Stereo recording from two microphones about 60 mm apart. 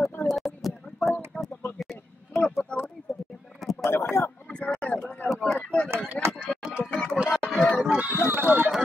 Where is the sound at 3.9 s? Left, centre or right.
Left.